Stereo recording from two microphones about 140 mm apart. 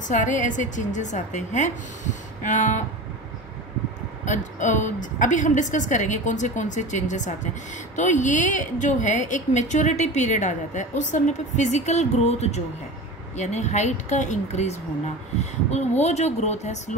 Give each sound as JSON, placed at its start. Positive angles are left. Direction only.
{"t": 0.1, "sound": "speech", "side_deg": 65}
{"t": 4.2, "sound": "speech", "side_deg": 60}